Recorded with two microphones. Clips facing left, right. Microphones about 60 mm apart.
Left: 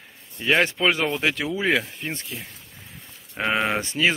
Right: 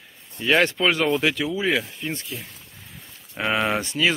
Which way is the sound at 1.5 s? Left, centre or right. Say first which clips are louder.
Left 1 dB; left.